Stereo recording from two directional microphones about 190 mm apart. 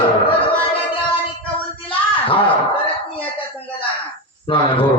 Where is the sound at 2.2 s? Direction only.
30° left (ahead or behind).